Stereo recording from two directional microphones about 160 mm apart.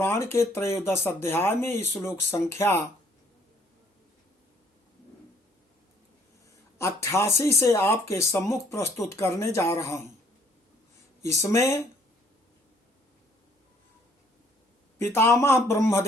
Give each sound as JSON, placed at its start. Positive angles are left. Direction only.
{"t": 0.0, "sound": "speech", "side_deg": 15}
{"t": 6.7, "sound": "speech", "side_deg": 15}
{"t": 11.4, "sound": "speech", "side_deg": 15}
{"t": 14.9, "sound": "speech", "side_deg": 15}